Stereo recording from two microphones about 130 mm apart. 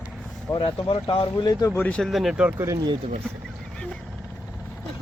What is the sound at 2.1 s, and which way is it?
Speech, centre (ahead or behind).